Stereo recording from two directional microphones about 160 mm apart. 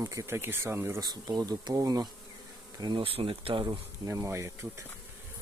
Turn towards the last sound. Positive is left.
turn(degrees=-20)  # may be behind; listen again after turning